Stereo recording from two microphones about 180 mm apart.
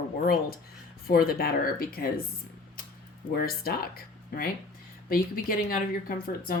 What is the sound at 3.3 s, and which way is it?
A woman's voice, 55° left (ahead or behind).